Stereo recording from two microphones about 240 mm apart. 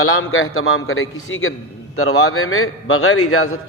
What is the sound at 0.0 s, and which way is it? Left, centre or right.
A man's voice, left.